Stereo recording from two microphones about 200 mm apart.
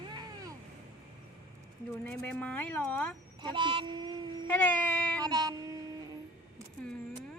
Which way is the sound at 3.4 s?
25° right (ahead or behind).